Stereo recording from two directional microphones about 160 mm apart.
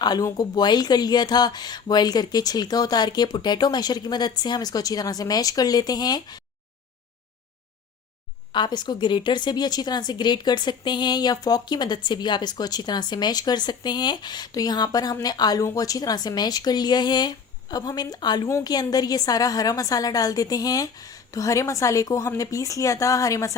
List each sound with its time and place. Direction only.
0.0 s a woman's voice: 25° left (ahead or behind)
8.5 s a woman's voice: 25° left (ahead or behind)